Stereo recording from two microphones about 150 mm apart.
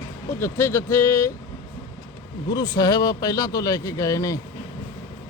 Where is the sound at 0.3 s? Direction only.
15° left (ahead or behind).